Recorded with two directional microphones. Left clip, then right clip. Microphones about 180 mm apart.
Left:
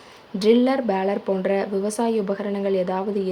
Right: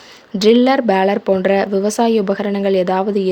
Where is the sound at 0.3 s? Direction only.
40° right (ahead or behind).